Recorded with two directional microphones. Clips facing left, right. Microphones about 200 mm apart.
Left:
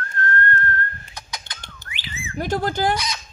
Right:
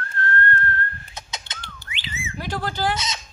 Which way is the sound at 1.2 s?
25° right (ahead or behind).